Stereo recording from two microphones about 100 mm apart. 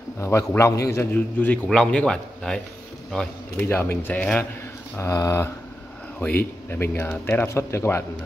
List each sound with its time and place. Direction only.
0.2 s a man's voice: 30° left (ahead or behind)
1.1 s speech: 15° left (ahead or behind)
3.5 s a man's voice: 20° left (ahead or behind)
4.9 s a man's voice: 30° left (ahead or behind)
6.1 s a man's voice: 15° left (ahead or behind)